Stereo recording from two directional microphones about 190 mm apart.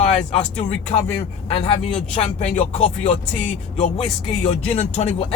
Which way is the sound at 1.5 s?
30° left (ahead or behind).